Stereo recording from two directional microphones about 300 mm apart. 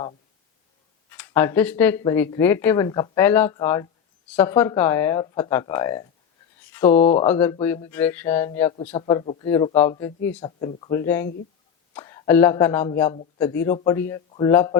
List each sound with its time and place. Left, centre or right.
1.1 s speech: centre
6.9 s speech: left
7.3 s speech: centre